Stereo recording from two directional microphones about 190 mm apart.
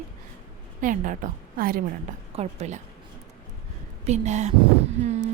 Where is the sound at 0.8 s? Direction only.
45° right (ahead or behind).